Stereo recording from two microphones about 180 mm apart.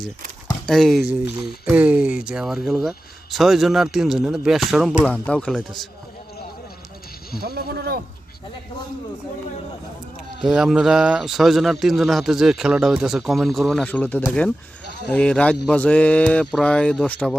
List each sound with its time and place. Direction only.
0.7 s a man's voice: centre (ahead or behind)
7.5 s speech: 60° right (ahead or behind)
10.4 s a man's voice: centre (ahead or behind)